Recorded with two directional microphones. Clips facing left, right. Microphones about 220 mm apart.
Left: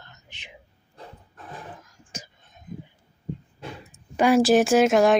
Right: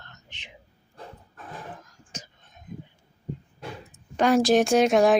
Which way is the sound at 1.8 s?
10° left (ahead or behind).